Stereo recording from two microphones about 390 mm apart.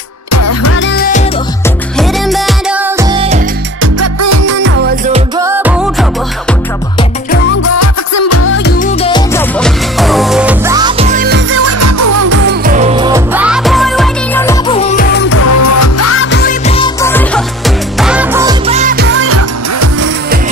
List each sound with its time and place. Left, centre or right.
0.3 s music: left
2.0 s music: centre
3.8 s music: right
4.6 s music: right
5.4 s music: centre
7.8 s music: left; by 12.3 s right
12.3 s music: right; by 15.3 s left
15.3 s music: left; by 20.1 s right